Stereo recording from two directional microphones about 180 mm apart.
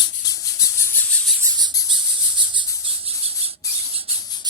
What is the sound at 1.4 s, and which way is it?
Insect, 25° right (ahead or behind).